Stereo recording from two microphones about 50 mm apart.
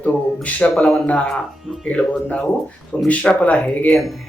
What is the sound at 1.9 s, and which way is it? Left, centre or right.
Speech, left.